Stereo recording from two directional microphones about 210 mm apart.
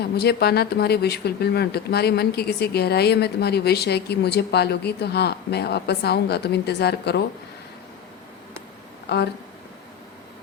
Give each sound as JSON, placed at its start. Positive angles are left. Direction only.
{"t": 0.0, "sound": "speech", "side_deg": 50}
{"t": 9.0, "sound": "speech", "side_deg": 50}